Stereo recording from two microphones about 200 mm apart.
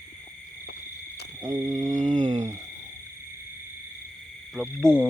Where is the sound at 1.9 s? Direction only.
40° right (ahead or behind).